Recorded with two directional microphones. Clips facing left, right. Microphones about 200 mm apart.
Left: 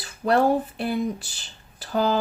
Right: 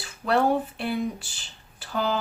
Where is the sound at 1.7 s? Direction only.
40° left (ahead or behind).